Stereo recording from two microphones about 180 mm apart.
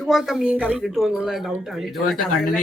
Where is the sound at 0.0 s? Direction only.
Centre (ahead or behind).